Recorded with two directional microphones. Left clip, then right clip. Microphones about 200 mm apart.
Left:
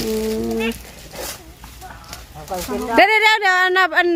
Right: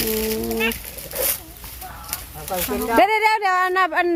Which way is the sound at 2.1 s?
5° right (ahead or behind).